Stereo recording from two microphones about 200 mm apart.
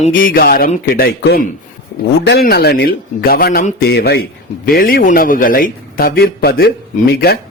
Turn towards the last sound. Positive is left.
turn(degrees=50)  # may be behind; listen again after turning